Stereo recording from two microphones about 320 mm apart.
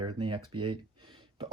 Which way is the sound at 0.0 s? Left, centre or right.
Centre.